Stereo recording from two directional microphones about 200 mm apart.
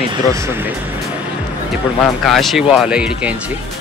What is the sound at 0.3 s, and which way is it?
Speech, 15° right (ahead or behind).